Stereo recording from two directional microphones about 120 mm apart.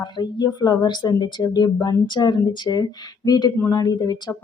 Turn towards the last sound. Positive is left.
turn(degrees=35)  # may be behind; listen again after turning